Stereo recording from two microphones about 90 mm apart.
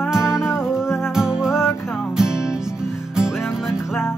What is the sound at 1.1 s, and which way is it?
Music, 5° right (ahead or behind).